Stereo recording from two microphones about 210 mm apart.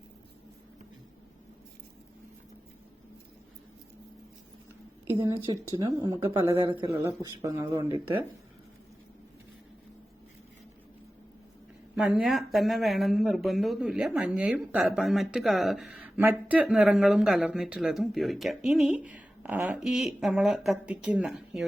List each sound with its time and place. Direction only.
5.1 s speech: 15° right (ahead or behind)
6.6 s speech: 25° right (ahead or behind)
11.9 s speech: 5° right (ahead or behind)